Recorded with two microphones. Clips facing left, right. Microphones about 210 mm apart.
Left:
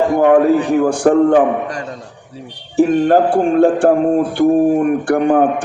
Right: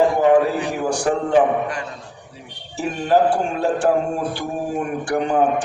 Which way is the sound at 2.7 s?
55° left (ahead or behind).